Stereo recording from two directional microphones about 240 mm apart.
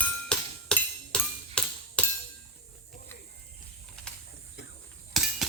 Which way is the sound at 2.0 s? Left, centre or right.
Centre.